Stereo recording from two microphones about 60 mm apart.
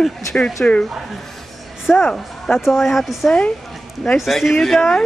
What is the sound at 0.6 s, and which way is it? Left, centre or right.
Speech, centre.